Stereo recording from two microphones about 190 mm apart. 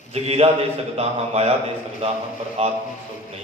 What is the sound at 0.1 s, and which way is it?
A man's voice, 35° right (ahead or behind).